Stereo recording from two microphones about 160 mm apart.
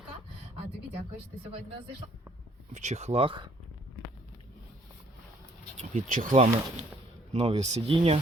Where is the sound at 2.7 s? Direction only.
45° right (ahead or behind).